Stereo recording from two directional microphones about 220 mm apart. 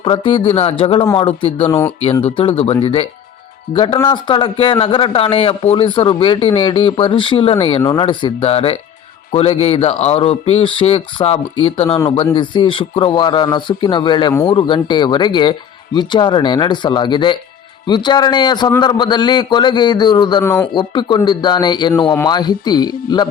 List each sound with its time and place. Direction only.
0.0 s speech: 25° left (ahead or behind)